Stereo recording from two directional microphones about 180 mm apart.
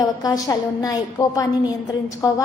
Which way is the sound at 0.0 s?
20° left (ahead or behind).